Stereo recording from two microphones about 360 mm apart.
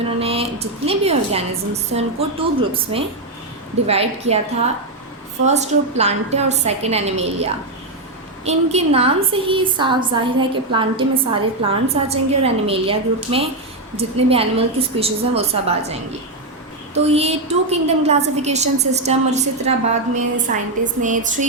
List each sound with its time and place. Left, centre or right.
0.2 s a woman's voice: centre
17.0 s a woman's voice: centre